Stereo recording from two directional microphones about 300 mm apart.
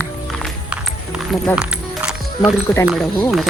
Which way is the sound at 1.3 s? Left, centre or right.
Centre.